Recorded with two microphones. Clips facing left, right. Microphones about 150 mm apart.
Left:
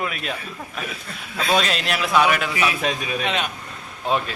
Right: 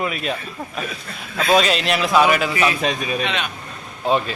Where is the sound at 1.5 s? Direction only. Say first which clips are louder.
Right 5 dB; centre (ahead or behind).